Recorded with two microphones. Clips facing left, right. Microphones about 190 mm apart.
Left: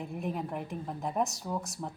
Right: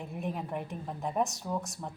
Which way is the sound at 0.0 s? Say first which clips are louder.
Left 1 dB; centre (ahead or behind).